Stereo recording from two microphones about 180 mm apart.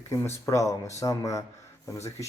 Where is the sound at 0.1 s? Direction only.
15° left (ahead or behind).